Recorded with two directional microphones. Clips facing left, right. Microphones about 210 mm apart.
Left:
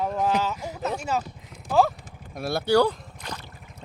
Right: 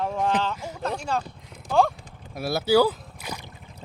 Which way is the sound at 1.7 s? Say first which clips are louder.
Even; centre (ahead or behind).